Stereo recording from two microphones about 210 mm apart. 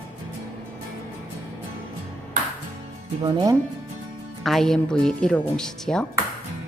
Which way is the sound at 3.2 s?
20° right (ahead or behind).